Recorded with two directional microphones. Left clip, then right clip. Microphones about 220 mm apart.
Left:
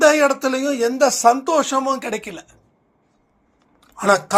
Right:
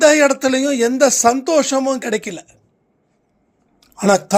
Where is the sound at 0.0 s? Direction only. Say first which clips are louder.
Right 2 dB; 50° right (ahead or behind).